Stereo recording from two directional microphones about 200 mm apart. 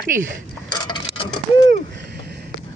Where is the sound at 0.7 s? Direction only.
20° left (ahead or behind).